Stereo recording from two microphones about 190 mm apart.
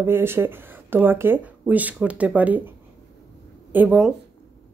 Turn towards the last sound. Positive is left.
turn(degrees=-5)  # may be behind; listen again after turning